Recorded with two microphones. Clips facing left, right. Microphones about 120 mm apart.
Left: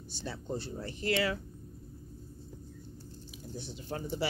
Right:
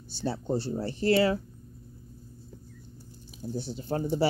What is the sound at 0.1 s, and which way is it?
Speech, 30° right (ahead or behind).